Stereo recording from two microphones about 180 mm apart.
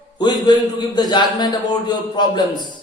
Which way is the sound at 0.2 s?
25° left (ahead or behind).